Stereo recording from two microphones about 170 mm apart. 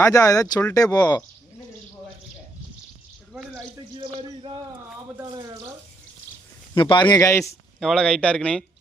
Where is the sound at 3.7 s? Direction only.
30° right (ahead or behind).